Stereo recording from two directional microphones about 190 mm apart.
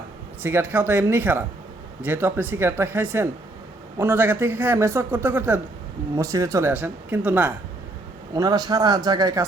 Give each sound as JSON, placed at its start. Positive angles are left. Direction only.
{"t": 0.4, "sound": "speech", "side_deg": -10}
{"t": 8.4, "sound": "speech", "side_deg": -20}